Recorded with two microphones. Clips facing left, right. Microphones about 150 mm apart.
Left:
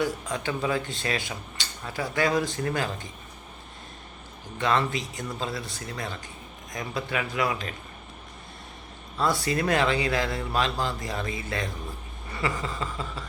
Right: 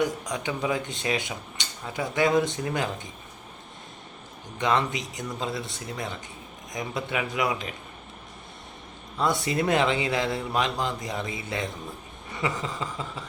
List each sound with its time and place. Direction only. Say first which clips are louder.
0.0 s speech: right 1 dB; 20° right (ahead or behind)
4.5 s speech: even; 20° right (ahead or behind)
9.1 s speech: even; 20° right (ahead or behind)
12.3 s a sound: even; 15° right (ahead or behind)